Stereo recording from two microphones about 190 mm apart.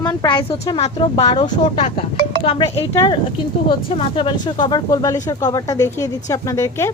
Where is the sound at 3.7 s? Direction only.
30° left (ahead or behind).